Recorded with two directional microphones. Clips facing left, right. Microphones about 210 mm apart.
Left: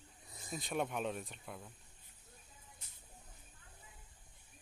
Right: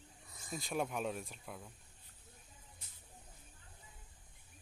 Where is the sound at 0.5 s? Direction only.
Centre (ahead or behind).